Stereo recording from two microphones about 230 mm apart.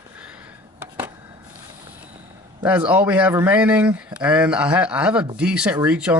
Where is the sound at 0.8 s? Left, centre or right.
Centre.